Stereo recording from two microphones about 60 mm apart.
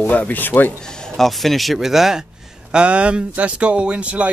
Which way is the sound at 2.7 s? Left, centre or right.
Centre.